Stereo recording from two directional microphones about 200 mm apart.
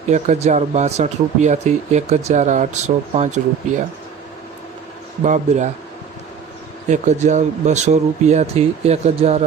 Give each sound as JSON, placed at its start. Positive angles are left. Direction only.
{"t": 0.1, "sound": "speech", "side_deg": -35}
{"t": 5.2, "sound": "speech", "side_deg": -35}
{"t": 6.8, "sound": "speech", "side_deg": -35}